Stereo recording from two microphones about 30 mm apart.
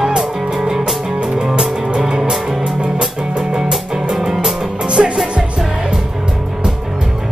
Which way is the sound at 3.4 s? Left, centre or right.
Right.